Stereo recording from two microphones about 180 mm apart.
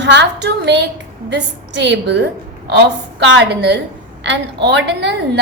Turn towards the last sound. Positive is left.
turn(degrees=-70)  # may be behind; listen again after turning